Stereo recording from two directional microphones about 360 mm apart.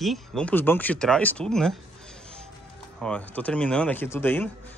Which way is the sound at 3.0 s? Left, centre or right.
Centre.